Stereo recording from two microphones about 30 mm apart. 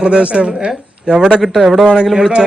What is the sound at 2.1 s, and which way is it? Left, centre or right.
Speech, right.